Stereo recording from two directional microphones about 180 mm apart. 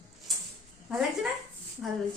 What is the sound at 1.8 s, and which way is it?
Speech, 10° right (ahead or behind).